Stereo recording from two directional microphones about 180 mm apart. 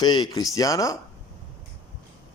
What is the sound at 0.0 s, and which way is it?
Speech, 20° left (ahead or behind).